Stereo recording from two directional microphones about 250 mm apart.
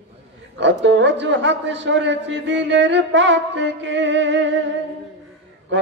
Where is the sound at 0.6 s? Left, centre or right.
Right.